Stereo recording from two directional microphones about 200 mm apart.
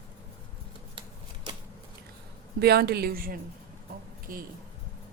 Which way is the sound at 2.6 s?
55° right (ahead or behind).